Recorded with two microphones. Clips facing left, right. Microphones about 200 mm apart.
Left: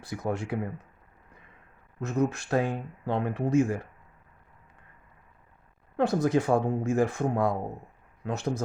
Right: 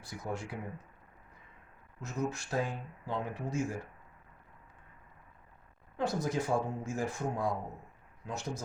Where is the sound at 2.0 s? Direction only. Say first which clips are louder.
Left 8 dB; 60° left (ahead or behind).